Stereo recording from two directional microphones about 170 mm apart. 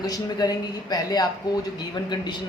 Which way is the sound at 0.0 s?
25° left (ahead or behind).